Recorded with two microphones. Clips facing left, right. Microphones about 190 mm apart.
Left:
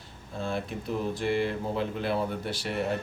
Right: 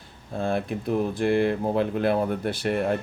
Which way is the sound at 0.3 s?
55° right (ahead or behind).